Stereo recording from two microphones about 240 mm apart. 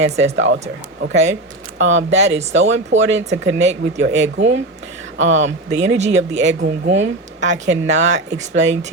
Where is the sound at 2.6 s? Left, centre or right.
Right.